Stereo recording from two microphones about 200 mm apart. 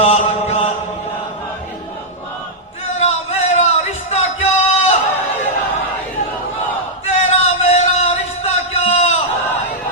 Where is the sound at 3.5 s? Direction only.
35° left (ahead or behind).